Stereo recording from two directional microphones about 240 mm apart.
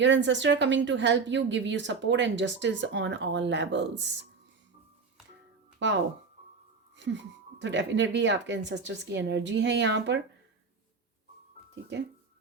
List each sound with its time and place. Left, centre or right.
0.0 s a woman's voice: right
6.9 s a woman's voice: right
11.7 s speech: right